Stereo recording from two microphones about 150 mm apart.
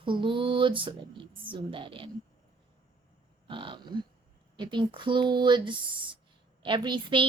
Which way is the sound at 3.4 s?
35° right (ahead or behind).